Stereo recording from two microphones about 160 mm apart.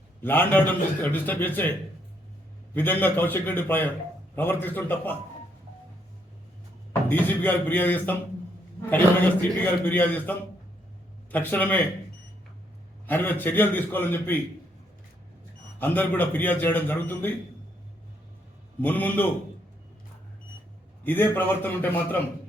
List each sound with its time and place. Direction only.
0.2 s a man's voice: 10° left (ahead or behind)
2.7 s a man's voice: 10° left (ahead or behind)
7.1 s a man's voice: 10° left (ahead or behind)
13.1 s a man's voice: 10° left (ahead or behind)
15.8 s a man's voice: 10° left (ahead or behind)
18.8 s a man's voice: 10° left (ahead or behind)
21.0 s a man's voice: 10° left (ahead or behind)